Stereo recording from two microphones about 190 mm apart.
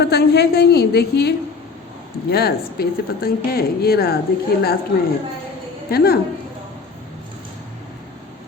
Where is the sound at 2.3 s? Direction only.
55° left (ahead or behind).